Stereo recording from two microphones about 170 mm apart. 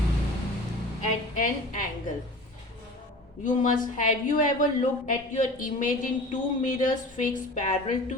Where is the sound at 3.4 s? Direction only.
50° left (ahead or behind).